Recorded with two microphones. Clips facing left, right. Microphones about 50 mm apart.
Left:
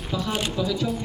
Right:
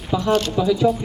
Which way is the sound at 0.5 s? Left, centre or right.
Centre.